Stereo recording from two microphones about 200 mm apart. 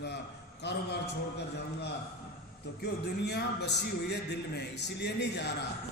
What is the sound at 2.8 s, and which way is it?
A man's voice, 55° left (ahead or behind).